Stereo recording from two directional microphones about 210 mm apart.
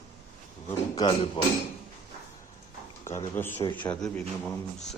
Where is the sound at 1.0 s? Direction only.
25° left (ahead or behind).